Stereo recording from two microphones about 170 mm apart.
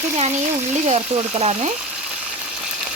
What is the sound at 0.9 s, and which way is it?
Speech, 40° right (ahead or behind).